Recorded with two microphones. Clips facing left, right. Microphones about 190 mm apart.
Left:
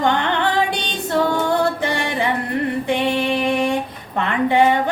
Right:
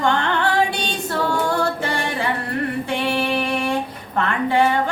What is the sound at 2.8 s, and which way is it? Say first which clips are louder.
Music: left 4 dB; 20° left (ahead or behind).